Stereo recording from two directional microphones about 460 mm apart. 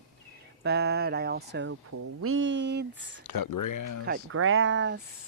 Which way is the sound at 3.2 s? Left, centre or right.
Left.